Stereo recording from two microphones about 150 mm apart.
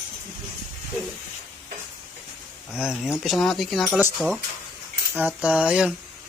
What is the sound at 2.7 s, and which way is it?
Speech, 5° right (ahead or behind).